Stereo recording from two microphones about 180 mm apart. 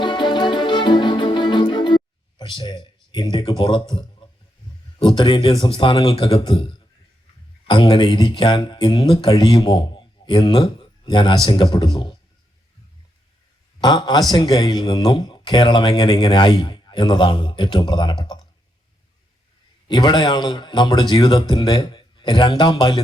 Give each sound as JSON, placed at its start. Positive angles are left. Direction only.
{"t": 0.0, "sound": "music", "side_deg": 25}
{"t": 3.6, "sound": "speech", "side_deg": 25}
{"t": 13.8, "sound": "speech", "side_deg": 25}
{"t": 19.9, "sound": "speech", "side_deg": 25}